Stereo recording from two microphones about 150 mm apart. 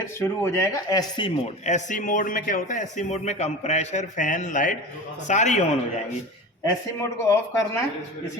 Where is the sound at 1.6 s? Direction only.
50° left (ahead or behind).